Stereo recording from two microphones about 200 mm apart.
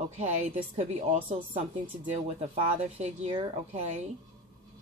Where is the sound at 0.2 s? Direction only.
35° right (ahead or behind).